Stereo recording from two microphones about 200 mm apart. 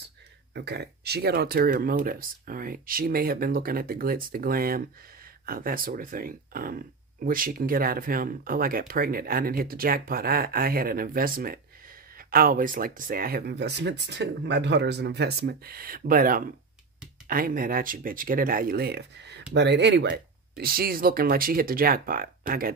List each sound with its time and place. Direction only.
0.6 s speech: 55° right (ahead or behind)